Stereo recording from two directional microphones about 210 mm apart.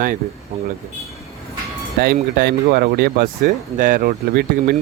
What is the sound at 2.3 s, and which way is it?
Speech, 45° right (ahead or behind).